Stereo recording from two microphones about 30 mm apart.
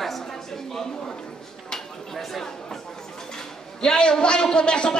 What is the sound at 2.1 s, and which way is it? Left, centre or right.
Speech, centre.